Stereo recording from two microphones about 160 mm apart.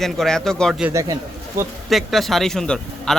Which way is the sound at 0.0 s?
5° left (ahead or behind).